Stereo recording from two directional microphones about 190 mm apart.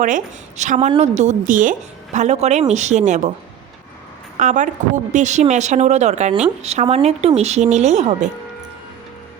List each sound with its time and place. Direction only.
0.0 s a woman's voice: 40° right (ahead or behind)
4.4 s a woman's voice: 40° right (ahead or behind)